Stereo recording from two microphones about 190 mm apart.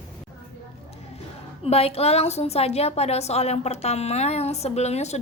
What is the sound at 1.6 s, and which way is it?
A woman's voice, 30° left (ahead or behind).